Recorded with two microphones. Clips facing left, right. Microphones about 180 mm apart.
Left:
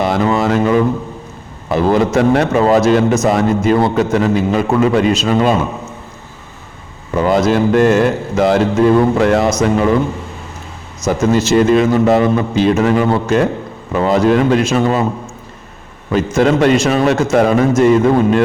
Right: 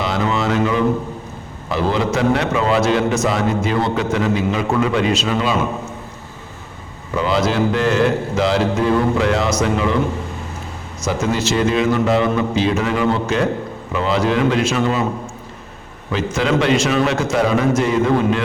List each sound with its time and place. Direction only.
0.0 s a sound: 50° left (ahead or behind)
1.7 s a man's voice: 50° left (ahead or behind)
7.2 s a man's voice: 50° left (ahead or behind)
11.0 s a man's voice: 45° left (ahead or behind)
16.1 s a man's voice: 45° left (ahead or behind)